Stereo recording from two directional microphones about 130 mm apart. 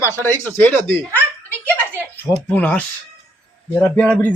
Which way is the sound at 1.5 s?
15° left (ahead or behind).